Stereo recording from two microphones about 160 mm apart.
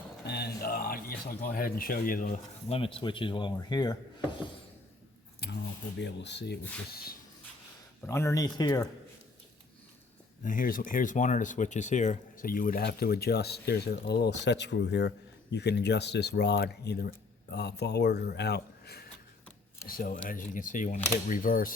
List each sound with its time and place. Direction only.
0.3 s speech: 80° left; by 2.4 s 60° left (ahead or behind)
2.6 s speech: 35° left (ahead or behind)
5.4 s a sound: 90° left
6.0 s speech: 90° left
6.9 s a sound: 70° left (ahead or behind)
8.0 s speech: 15° left (ahead or behind)
10.4 s speech: 55° left (ahead or behind); by 19.0 s 85° left
19.9 s speech: 60° left (ahead or behind)